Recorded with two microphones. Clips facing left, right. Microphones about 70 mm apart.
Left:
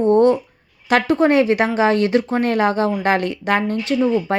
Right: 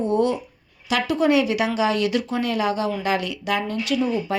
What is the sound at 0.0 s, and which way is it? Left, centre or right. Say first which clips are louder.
Speech: left 7 dB; left.